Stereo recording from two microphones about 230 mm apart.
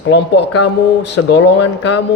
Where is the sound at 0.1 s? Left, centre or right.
Left.